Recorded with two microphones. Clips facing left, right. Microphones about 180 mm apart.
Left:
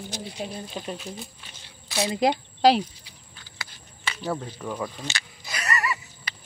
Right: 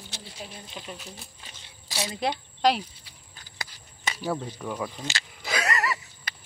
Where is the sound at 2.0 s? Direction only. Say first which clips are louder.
Left 6 dB; 15° left (ahead or behind).